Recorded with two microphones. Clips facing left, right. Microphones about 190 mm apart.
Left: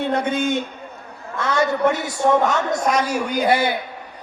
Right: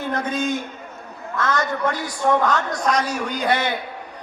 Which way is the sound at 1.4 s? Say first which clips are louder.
Left 2 dB; 10° left (ahead or behind).